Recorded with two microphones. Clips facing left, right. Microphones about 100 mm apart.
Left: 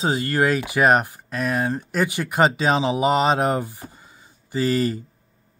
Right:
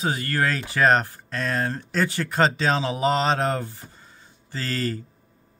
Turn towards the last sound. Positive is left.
turn(degrees=15)  # may be behind; listen again after turning